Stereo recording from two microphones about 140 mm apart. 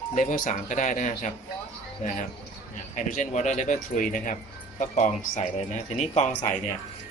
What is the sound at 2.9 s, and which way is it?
Speech, 65° left (ahead or behind).